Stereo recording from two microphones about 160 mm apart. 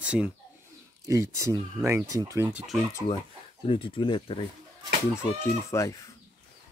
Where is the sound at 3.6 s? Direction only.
35° left (ahead or behind).